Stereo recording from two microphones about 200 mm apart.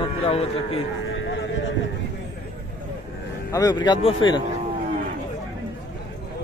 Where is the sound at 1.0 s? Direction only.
65° left (ahead or behind).